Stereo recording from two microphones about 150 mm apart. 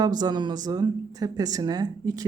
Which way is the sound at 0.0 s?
25° right (ahead or behind).